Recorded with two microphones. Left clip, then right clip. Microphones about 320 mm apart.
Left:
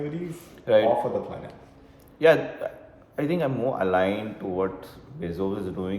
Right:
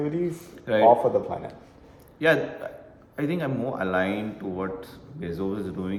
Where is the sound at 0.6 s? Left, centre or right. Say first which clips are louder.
Right 1 dB; centre.